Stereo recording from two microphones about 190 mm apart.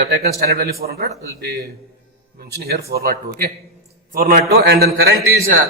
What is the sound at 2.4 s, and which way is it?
A man's voice, 55° right (ahead or behind).